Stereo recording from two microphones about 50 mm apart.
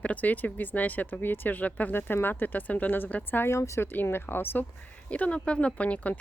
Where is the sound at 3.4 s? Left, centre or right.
Left.